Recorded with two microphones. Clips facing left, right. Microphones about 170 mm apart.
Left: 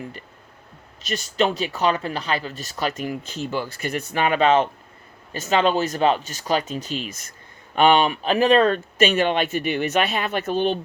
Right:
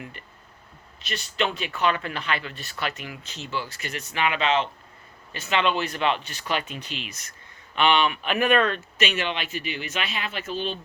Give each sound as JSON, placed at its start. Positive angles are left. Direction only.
{"t": 0.0, "sound": "speech", "side_deg": 35}